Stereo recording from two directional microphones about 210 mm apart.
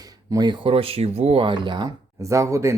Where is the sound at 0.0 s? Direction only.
15° right (ahead or behind).